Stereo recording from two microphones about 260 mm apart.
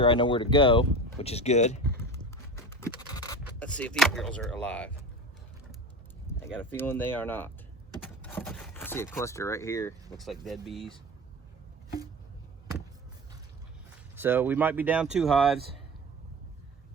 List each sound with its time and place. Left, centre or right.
0.0 s speech: centre
2.6 s scratch: centre
3.4 s speech: centre
6.7 s speech: centre
8.0 s a sound: centre
10.4 s speech: centre
14.2 s speech: centre